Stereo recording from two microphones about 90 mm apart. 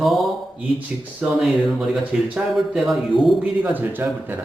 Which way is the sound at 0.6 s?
15° right (ahead or behind).